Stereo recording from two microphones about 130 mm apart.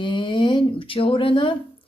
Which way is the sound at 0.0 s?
40° left (ahead or behind).